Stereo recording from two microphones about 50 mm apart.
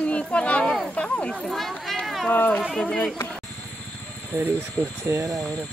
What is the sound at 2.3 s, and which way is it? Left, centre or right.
Speech, left.